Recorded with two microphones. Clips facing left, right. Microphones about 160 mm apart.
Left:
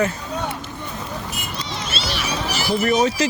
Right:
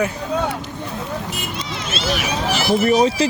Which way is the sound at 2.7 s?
40° right (ahead or behind).